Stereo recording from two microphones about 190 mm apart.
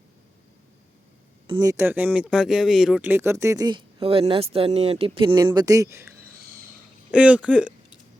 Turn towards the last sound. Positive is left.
turn(degrees=-5)  # may be behind; listen again after turning